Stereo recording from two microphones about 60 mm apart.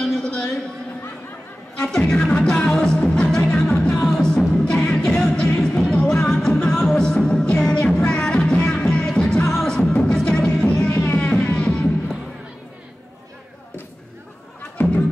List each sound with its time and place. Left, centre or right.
0.0 s a sound: centre
1.8 s music: centre
14.8 s music: left